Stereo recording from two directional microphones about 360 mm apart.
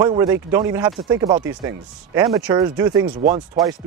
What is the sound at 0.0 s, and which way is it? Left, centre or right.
Speech, centre.